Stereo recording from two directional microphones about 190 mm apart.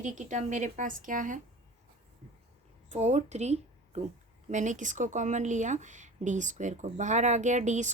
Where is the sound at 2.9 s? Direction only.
35° right (ahead or behind).